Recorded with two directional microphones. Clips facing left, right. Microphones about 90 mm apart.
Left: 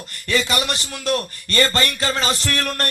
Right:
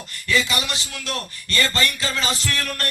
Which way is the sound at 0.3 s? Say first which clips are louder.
Left 2 dB; 55° left (ahead or behind).